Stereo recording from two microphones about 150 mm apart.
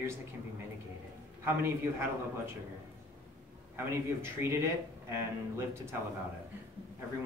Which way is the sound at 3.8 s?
15° right (ahead or behind).